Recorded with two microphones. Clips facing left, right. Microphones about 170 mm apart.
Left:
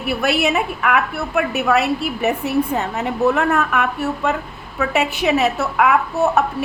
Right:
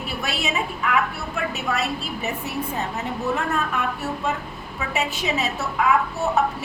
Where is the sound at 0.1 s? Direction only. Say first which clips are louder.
Left 11 dB; 65° left (ahead or behind).